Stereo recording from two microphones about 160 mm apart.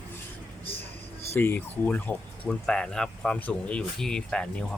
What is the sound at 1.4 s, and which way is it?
Speech, 10° left (ahead or behind).